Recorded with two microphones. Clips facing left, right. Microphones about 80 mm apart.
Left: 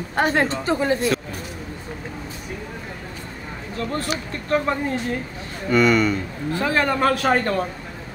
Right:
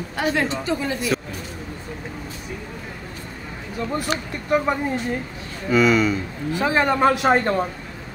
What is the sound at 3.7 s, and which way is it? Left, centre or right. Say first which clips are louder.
Speech: right 1 dB; centre.